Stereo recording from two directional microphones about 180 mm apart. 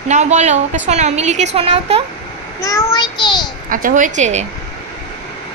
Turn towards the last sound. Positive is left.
turn(degrees=-40)  # may be behind; listen again after turning